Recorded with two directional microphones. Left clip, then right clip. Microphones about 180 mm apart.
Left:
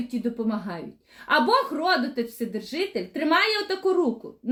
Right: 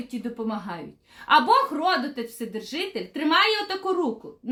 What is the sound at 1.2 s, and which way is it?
A woman's voice, 15° right (ahead or behind).